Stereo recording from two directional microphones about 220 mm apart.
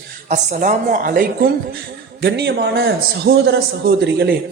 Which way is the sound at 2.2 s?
50° right (ahead or behind).